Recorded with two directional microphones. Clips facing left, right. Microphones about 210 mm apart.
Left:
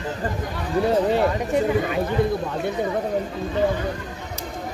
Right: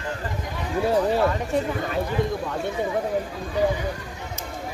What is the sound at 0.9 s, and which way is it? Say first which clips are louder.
Speech: left 1 dB; 25° left (ahead or behind).